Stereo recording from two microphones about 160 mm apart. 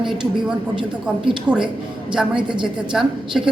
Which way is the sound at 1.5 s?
5° right (ahead or behind).